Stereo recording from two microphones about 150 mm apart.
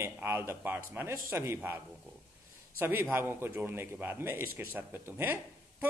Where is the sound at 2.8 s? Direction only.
15° right (ahead or behind).